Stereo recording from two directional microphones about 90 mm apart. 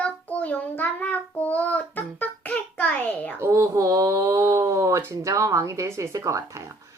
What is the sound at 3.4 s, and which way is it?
Speech, 35° right (ahead or behind).